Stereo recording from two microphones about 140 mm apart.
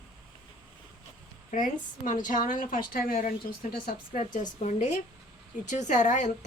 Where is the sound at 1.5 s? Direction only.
70° left (ahead or behind).